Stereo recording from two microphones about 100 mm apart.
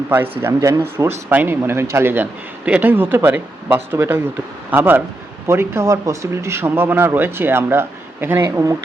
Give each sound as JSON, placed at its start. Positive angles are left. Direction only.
{"t": 0.1, "sound": "speech", "side_deg": -25}